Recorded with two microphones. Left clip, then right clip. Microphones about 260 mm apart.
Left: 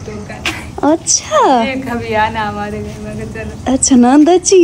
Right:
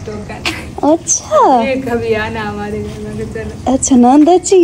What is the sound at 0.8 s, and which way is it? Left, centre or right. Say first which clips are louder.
Speech: even; left.